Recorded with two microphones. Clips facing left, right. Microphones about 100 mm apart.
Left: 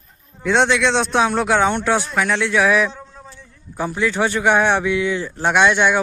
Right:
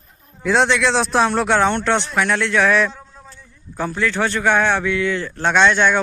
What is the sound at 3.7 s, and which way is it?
Speech, 15° left (ahead or behind).